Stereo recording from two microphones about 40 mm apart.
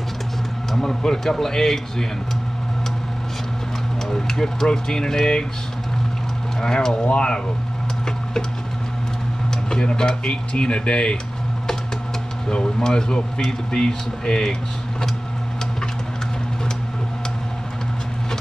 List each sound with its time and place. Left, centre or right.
0.7 s speech: centre
4.1 s speech: centre
6.6 s speech: centre
9.5 s speech: centre
12.4 s speech: left